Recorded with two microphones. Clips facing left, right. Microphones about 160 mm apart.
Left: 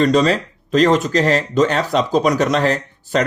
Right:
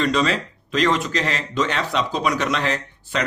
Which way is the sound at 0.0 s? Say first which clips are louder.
Left 6 dB; 40° left (ahead or behind).